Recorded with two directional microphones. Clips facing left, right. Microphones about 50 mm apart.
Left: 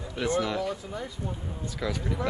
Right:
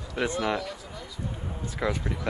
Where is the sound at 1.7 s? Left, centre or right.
Right.